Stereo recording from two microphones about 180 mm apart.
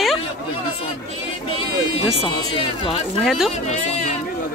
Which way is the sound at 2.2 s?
30° left (ahead or behind).